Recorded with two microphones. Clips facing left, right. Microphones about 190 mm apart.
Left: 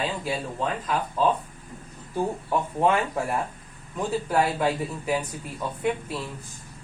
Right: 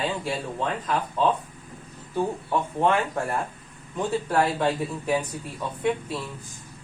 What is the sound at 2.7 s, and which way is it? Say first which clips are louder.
Speech: even; 5° left (ahead or behind).